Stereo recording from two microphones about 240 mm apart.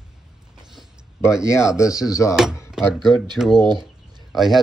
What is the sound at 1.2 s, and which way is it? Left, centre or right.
Speech, centre.